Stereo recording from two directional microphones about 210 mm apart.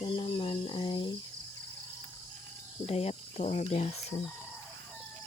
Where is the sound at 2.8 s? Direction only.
30° left (ahead or behind).